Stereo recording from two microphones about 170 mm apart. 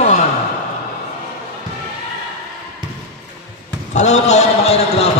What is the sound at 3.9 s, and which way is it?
Music, 45° left (ahead or behind).